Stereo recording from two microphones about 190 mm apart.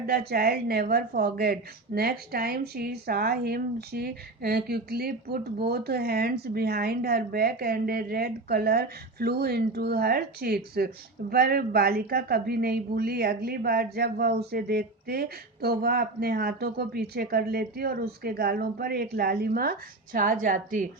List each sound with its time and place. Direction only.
0.0 s speech: 55° right (ahead or behind)